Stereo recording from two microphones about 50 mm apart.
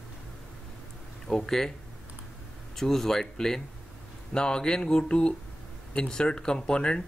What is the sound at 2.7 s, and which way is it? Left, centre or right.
Speech, centre.